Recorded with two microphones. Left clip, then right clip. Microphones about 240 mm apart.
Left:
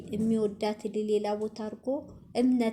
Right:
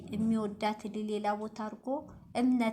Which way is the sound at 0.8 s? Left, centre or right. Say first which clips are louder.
Left 8 dB; right.